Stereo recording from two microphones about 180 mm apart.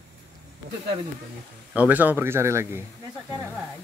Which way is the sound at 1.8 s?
10° right (ahead or behind).